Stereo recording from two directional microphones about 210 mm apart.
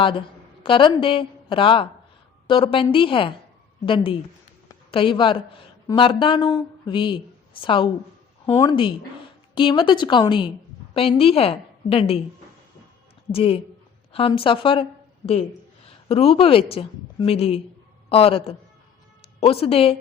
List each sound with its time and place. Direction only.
0.0 s a woman's voice: 25° left (ahead or behind)
13.3 s a woman's voice: 25° left (ahead or behind)
16.0 s a woman's voice: 25° left (ahead or behind)